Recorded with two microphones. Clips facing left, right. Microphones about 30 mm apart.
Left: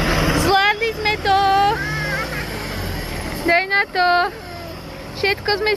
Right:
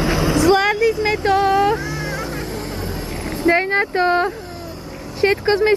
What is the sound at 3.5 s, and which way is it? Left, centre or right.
Speech, left.